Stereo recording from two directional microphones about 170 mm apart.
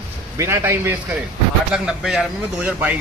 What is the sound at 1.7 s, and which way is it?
A man's voice, centre (ahead or behind).